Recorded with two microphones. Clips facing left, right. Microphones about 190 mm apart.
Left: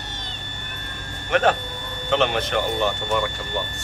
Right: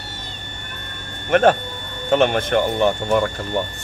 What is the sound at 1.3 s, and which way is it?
Speech, 50° right (ahead or behind).